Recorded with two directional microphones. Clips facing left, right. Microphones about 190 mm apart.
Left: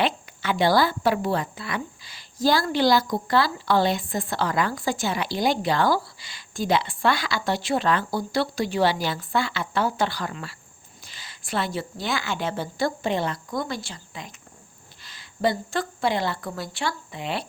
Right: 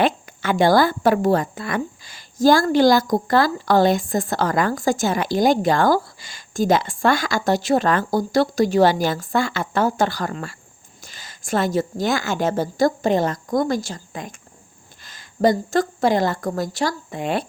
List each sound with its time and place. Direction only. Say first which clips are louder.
0.0 s a woman's voice: right 5 dB; 50° right (ahead or behind)